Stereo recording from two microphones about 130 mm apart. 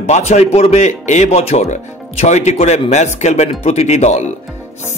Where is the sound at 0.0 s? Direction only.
60° left (ahead or behind).